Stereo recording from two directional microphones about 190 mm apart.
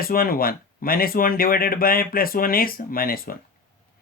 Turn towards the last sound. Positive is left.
turn(degrees=50)  # may be behind; listen again after turning